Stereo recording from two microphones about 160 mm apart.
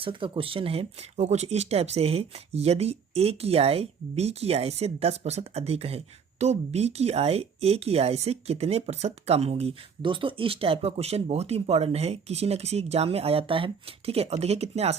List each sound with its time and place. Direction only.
0.0 s speech: 35° right (ahead or behind)